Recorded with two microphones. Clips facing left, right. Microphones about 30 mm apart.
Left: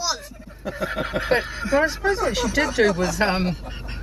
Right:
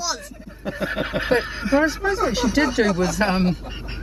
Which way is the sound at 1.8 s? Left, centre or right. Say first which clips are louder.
Even; centre.